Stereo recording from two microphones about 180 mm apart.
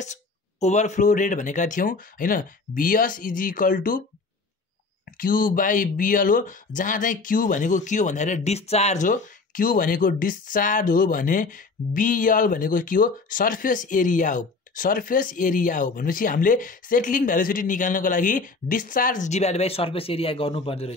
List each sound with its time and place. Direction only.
0.0 s speech: 40° left (ahead or behind)
5.1 s speech: 50° left (ahead or behind); by 20.9 s 30° left (ahead or behind)